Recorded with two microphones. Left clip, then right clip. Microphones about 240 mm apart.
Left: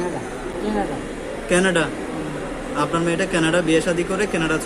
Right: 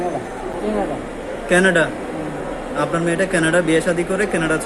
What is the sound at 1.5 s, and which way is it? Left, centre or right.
Speech, centre.